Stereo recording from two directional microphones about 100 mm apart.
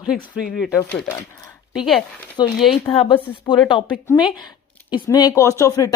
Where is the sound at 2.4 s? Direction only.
45° left (ahead or behind).